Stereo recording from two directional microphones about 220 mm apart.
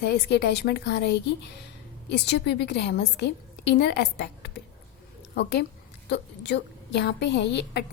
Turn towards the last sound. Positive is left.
turn(degrees=50)  # may be behind; listen again after turning